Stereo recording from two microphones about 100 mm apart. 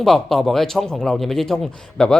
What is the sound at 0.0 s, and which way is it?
A man's voice, 5° left (ahead or behind).